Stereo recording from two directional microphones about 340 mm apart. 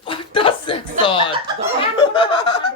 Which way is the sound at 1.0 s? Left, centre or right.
Centre.